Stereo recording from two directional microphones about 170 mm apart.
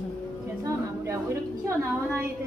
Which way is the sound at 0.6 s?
15° right (ahead or behind).